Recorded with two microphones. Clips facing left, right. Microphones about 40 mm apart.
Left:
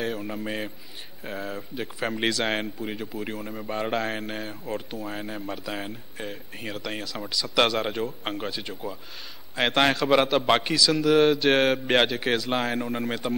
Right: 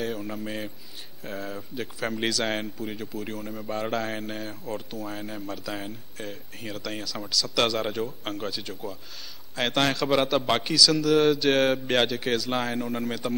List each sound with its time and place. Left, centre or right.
0.0 s speech: centre